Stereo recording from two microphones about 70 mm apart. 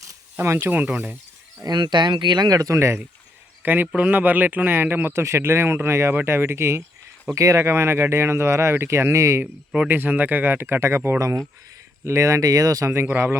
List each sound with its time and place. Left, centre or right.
0.3 s speech: right
0.7 s speech: right
1.6 s speech: right
2.7 s speech: right
3.6 s speech: right
9.4 s speech: centre
9.9 s speech: right
11.2 s speech: right
12.0 s speech: right
12.9 s speech: right